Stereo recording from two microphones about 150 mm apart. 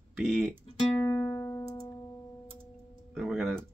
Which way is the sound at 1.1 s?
20° left (ahead or behind).